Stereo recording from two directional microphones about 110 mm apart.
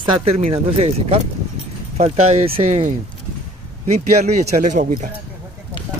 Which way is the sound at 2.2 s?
70° right (ahead or behind).